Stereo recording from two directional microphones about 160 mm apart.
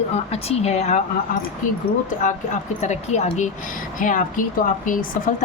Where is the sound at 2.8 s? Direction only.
45° left (ahead or behind).